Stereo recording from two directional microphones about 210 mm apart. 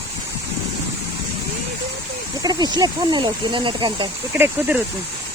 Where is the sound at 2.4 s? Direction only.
20° right (ahead or behind).